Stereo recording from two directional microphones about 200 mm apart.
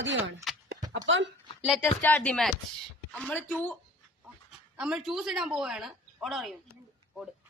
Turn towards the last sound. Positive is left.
turn(degrees=0)  # may be behind; listen again after turning